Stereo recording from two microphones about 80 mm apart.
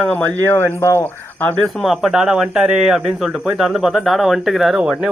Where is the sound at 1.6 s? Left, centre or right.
Centre.